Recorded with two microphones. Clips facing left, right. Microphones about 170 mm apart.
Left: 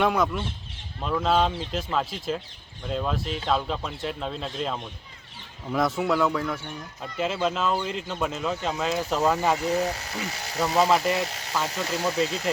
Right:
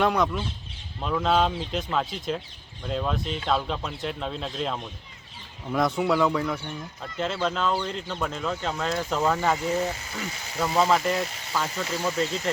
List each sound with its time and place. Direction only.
0.0 s speech: centre (ahead or behind)
10.6 s speech: 5° left (ahead or behind)